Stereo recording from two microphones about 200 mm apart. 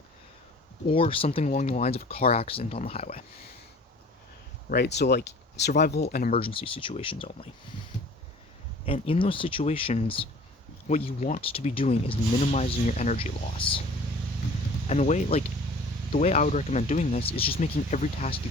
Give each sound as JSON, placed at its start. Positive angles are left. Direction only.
{"t": 0.9, "sound": "speech", "side_deg": 25}
{"t": 4.7, "sound": "speech", "side_deg": 55}
{"t": 6.3, "sound": "speech", "side_deg": 25}
{"t": 8.9, "sound": "speech", "side_deg": 25}
{"t": 14.8, "sound": "speech", "side_deg": 35}